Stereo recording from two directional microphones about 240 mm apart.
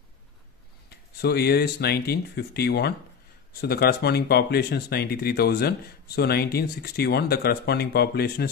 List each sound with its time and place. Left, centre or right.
0.8 s speech: left